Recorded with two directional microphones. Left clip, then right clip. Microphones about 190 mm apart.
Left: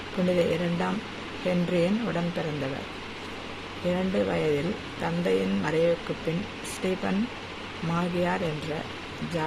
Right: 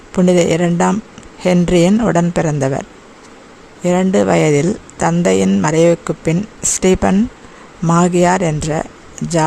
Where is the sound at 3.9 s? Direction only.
70° right (ahead or behind).